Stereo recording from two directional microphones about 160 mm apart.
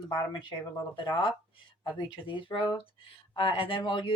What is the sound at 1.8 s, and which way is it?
Speech, 30° left (ahead or behind).